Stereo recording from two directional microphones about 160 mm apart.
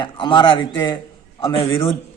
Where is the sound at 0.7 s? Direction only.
20° left (ahead or behind).